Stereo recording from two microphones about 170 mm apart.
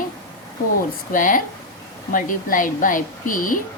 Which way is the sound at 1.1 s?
50° left (ahead or behind).